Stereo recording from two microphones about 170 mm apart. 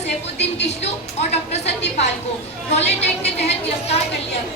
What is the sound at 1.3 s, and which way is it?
Speech, 40° left (ahead or behind).